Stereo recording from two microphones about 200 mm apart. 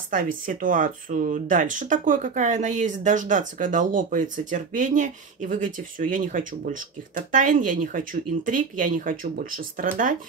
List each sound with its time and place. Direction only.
0.1 s speech: 40° right (ahead or behind)